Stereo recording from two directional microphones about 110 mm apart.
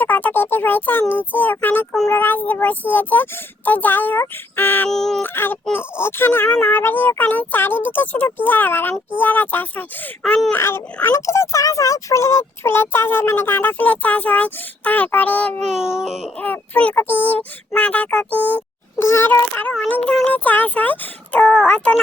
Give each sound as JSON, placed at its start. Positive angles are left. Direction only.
{"t": 0.0, "sound": "a child's voice", "side_deg": 15}
{"t": 4.9, "sound": "speech", "side_deg": 5}
{"t": 5.2, "sound": "a child's voice", "side_deg": 20}
{"t": 15.8, "sound": "speech", "side_deg": -5}
{"t": 16.4, "sound": "a child's voice", "side_deg": 15}